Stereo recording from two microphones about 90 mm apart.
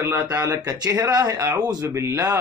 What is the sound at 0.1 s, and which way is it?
Speech, 20° right (ahead or behind).